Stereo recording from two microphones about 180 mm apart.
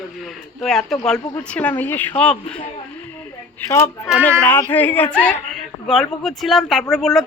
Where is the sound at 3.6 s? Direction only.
15° left (ahead or behind).